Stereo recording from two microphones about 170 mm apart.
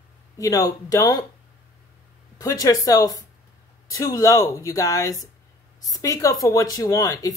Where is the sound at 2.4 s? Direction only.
20° left (ahead or behind).